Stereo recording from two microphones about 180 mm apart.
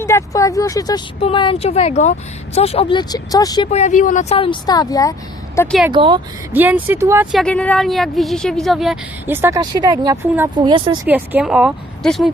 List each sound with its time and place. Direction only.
0.0 s speech: 15° left (ahead or behind)
3.7 s speech: 40° left (ahead or behind); by 5.7 s 15° left (ahead or behind)
5.9 s speech: 25° right (ahead or behind)
6.5 s speech: 10° right (ahead or behind)
7.3 s speech: 5° left (ahead or behind)
9.3 s speech: 15° right (ahead or behind)
11.0 s speech: 10° right (ahead or behind)